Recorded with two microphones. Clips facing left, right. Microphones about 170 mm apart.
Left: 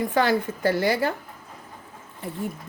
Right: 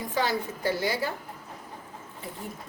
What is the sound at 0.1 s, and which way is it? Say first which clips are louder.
A woman's voice: left 6 dB; 60° left (ahead or behind).